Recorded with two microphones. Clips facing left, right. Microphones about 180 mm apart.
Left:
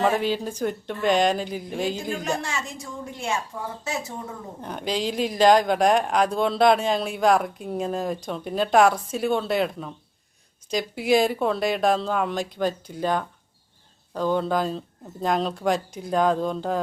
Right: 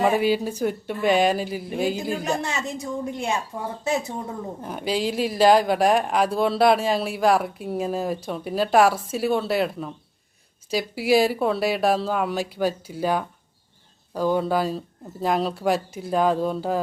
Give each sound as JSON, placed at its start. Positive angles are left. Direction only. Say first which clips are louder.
{"t": 0.0, "sound": "speech", "louder": "right 2 dB", "side_deg": -10}
{"t": 2.4, "sound": "a woman's voice", "louder": "right 4 dB", "side_deg": -20}
{"t": 4.6, "sound": "speech", "louder": "right 1 dB", "side_deg": -5}